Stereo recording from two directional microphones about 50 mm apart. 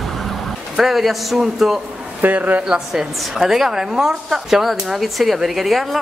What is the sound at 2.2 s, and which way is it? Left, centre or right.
Speech, right.